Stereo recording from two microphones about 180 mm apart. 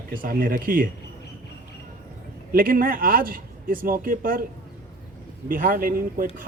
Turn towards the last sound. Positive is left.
turn(degrees=-55)  # may be behind; listen again after turning